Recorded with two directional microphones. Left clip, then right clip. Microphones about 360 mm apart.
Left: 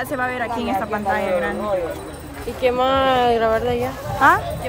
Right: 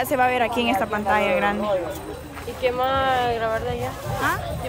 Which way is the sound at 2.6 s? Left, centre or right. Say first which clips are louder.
Left 4 dB; left.